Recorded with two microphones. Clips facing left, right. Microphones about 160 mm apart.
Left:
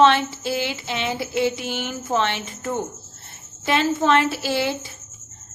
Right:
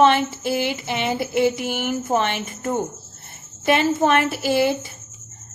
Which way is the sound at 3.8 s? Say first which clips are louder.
Right 2 dB; 15° right (ahead or behind).